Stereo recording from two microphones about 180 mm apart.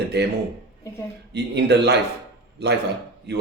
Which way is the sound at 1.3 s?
65° right (ahead or behind).